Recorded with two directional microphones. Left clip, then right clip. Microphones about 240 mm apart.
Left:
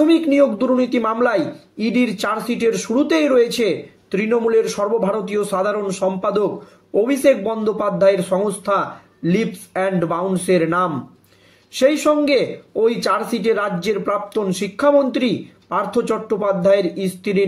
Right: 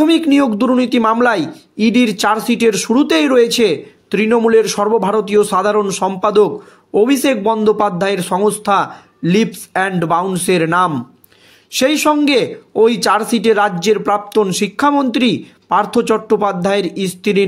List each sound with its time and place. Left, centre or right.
0.0 s speech: right